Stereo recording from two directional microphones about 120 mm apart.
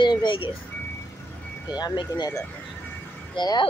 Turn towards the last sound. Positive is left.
turn(degrees=35)  # may be behind; listen again after turning